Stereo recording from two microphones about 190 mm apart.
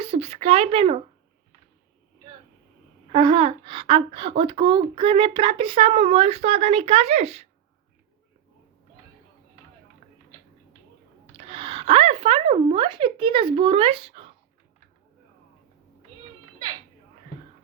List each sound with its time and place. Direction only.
0.0 s speech: 30° right (ahead or behind)
3.1 s speech: 30° right (ahead or behind)
10.0 s a sound: 35° right (ahead or behind)
11.3 s speech: 30° right (ahead or behind)